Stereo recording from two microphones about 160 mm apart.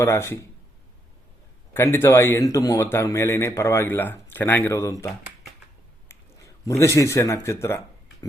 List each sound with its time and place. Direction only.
0.0 s a man's voice: 15° left (ahead or behind)
1.7 s a man's voice: 15° left (ahead or behind)
6.1 s a sound: 15° left (ahead or behind)
6.7 s a man's voice: 20° left (ahead or behind)